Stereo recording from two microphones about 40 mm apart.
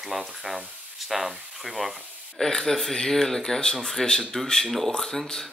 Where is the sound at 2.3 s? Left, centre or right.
Centre.